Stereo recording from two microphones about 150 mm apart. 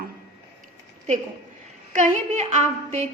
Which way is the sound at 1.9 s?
60° right (ahead or behind).